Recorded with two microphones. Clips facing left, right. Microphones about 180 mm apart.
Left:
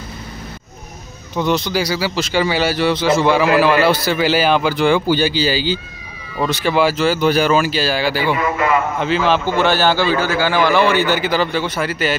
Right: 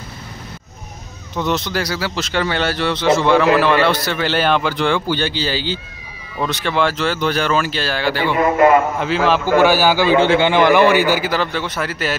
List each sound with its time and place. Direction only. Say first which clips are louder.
1.3 s a man's voice: left 2 dB; centre (ahead or behind)
8.4 s a man's voice: right 6 dB; 45° right (ahead or behind)
9.0 s a man's voice: even; centre (ahead or behind)
10.1 s a man's voice: right 4 dB; 25° right (ahead or behind); by 12.2 s centre (ahead or behind)